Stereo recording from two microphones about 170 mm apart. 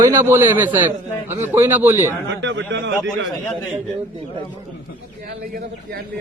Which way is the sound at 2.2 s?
90° right.